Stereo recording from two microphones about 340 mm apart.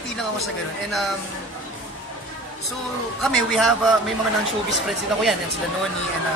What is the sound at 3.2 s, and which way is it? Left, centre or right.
Speech, centre.